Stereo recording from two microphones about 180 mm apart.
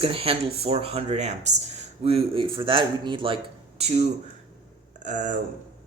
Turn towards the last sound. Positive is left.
turn(degrees=-45)  # may be behind; listen again after turning